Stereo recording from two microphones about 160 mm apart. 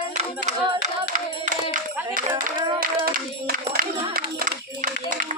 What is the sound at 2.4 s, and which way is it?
Clapping, 65° right (ahead or behind).